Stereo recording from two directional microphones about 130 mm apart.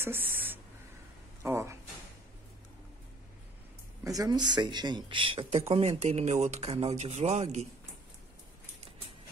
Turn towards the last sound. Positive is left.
turn(degrees=-60)  # may be behind; listen again after turning